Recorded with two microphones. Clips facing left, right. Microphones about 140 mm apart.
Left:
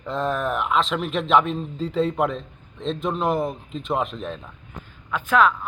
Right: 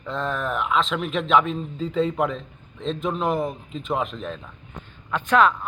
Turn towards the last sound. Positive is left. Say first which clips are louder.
# even
turn(degrees=0)  # may be behind; listen again after turning